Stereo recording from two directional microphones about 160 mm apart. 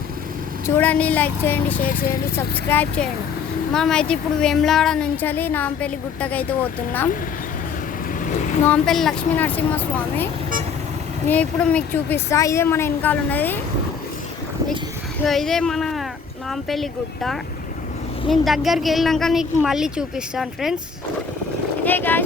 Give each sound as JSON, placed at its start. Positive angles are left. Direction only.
{"t": 0.8, "sound": "a woman's voice", "side_deg": 10}
{"t": 1.8, "sound": "speech", "side_deg": 65}
{"t": 2.3, "sound": "a woman's voice", "side_deg": 10}
{"t": 8.6, "sound": "a woman's voice", "side_deg": 5}
{"t": 11.3, "sound": "a woman's voice", "side_deg": 10}
{"t": 15.2, "sound": "a woman's voice", "side_deg": 0}
{"t": 21.8, "sound": "a woman's voice", "side_deg": 10}